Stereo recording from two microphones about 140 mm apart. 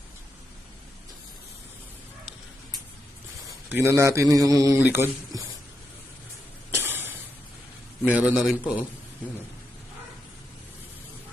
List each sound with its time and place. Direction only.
3.7 s a man's voice: 15° right (ahead or behind)
6.7 s a sound: 15° right (ahead or behind)
8.0 s a man's voice: 10° right (ahead or behind)